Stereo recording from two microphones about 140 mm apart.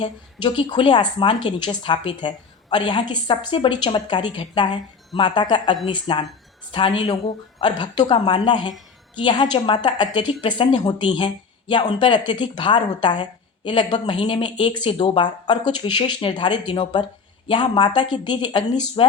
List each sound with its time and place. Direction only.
0.0 s speech: 35° left (ahead or behind)